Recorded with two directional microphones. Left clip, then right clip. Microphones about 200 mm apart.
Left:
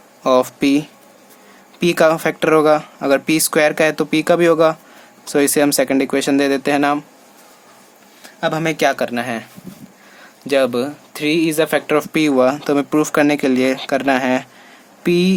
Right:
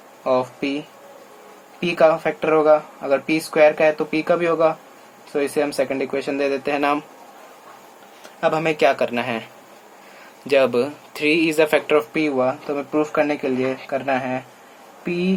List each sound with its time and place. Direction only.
0.3 s speech: 45° left (ahead or behind)
1.8 s speech: 45° left (ahead or behind)
8.4 s speech: 30° left (ahead or behind); by 15.3 s 45° left (ahead or behind)